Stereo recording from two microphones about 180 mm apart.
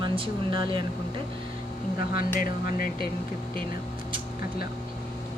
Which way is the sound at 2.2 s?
55° left (ahead or behind).